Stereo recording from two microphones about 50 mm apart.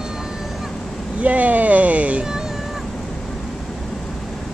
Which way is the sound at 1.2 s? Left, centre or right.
Right.